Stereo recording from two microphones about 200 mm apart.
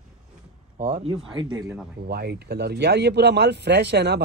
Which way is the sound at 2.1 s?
55° right (ahead or behind).